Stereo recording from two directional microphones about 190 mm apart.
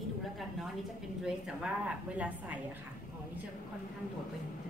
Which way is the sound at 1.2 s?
5° right (ahead or behind).